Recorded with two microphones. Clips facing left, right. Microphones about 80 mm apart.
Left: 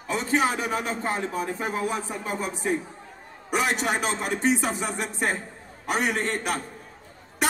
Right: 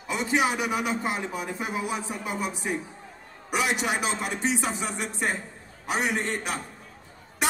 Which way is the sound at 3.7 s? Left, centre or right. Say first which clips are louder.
Left 1 dB; centre.